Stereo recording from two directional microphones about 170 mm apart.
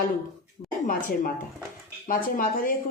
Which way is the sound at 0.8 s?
55° left (ahead or behind).